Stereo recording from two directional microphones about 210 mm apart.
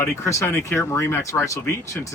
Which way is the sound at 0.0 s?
15° left (ahead or behind).